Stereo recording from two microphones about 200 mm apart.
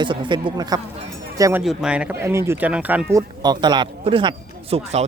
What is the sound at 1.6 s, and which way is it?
Speech, centre (ahead or behind).